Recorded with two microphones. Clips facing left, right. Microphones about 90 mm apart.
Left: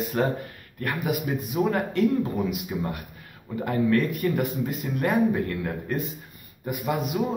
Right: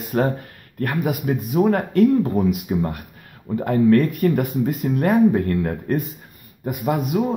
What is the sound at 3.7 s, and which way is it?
Speech, 45° right (ahead or behind).